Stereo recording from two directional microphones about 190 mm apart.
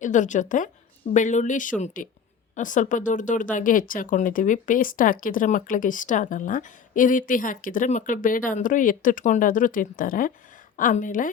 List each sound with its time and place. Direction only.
0.0 s a woman's voice: 40° left (ahead or behind)